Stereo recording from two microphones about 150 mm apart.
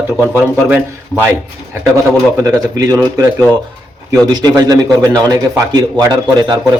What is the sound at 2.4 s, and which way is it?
Speech, 25° right (ahead or behind).